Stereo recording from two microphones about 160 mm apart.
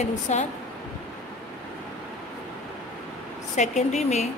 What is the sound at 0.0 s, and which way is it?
Speech, 45° left (ahead or behind).